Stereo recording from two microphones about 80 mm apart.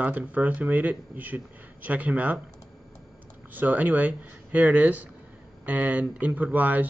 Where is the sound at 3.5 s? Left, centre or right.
Right.